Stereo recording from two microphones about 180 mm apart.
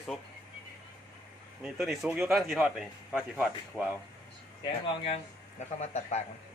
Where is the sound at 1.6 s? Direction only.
Centre (ahead or behind).